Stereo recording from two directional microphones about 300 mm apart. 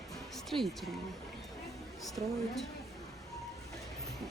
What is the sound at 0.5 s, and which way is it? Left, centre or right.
Speech, centre.